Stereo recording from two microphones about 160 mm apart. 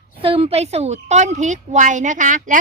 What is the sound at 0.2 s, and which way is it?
A woman's voice, 35° right (ahead or behind).